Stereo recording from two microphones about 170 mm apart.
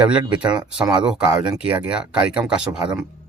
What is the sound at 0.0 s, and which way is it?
Speech, 5° right (ahead or behind).